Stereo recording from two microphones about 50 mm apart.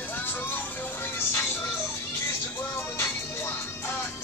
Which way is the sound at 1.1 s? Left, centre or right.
Left.